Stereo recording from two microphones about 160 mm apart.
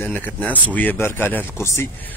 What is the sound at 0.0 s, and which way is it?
Speech, 10° left (ahead or behind).